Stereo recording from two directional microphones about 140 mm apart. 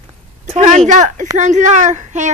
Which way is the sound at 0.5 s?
55° right (ahead or behind).